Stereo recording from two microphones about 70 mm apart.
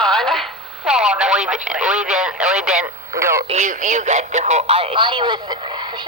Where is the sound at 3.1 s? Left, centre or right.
Right.